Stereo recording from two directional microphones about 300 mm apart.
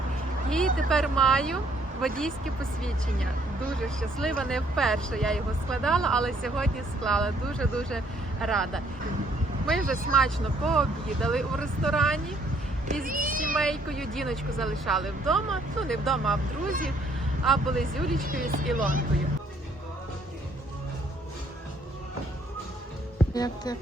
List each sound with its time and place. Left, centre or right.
0.5 s speech: centre
10.2 s speech: centre
12.9 s a child's voice: right
13.6 s speech: centre
16.6 s speech: right
17.4 s speech: centre
18.3 s speech: right
23.3 s speech: centre